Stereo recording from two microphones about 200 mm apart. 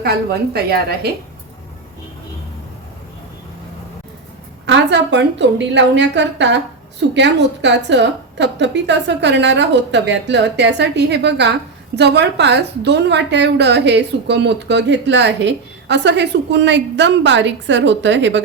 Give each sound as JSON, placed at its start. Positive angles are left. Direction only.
{"t": 0.0, "sound": "a woman's voice", "side_deg": -50}
{"t": 4.6, "sound": "a woman's voice", "side_deg": -60}